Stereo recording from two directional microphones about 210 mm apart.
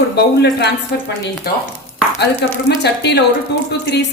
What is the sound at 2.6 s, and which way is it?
Speech, 55° left (ahead or behind).